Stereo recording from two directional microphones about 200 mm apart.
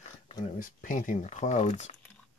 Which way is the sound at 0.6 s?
40° left (ahead or behind).